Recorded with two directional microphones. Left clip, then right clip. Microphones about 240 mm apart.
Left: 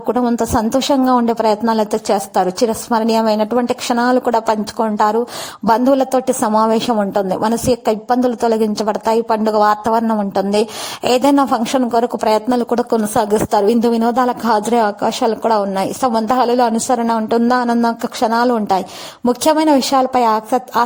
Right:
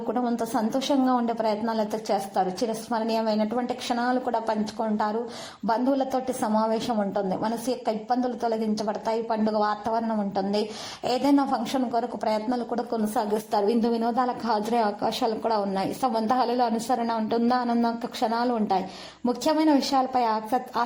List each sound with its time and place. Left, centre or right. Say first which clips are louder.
0.1 s a woman's voice: left 11 dB; left